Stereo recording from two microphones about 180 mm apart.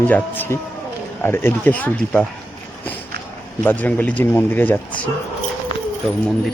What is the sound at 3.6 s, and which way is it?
Speech, 10° left (ahead or behind).